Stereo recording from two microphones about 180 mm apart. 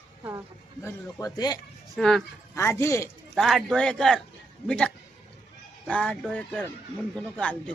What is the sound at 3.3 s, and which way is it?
Speech, centre (ahead or behind).